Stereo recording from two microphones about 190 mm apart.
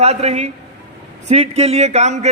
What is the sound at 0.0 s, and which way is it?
A man's voice, 35° right (ahead or behind).